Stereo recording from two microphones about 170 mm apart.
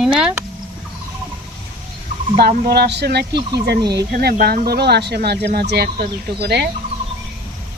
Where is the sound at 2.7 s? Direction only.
70° right (ahead or behind).